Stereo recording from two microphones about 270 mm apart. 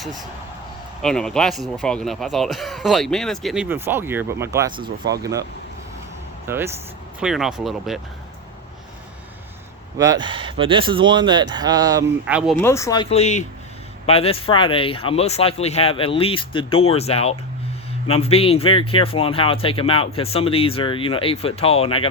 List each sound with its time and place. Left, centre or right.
1.0 s speech: centre
6.5 s speech: centre
10.0 s speech: centre
12.6 s speech: centre